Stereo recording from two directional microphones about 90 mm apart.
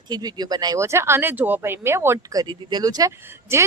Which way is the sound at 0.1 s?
50° right (ahead or behind).